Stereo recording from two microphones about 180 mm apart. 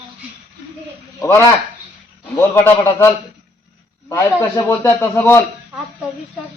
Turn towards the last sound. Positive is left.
turn(degrees=10)  # may be behind; listen again after turning